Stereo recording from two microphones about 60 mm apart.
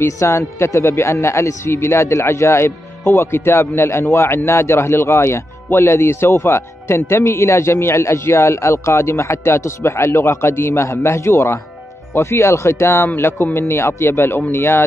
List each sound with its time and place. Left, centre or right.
0.0 s speech: left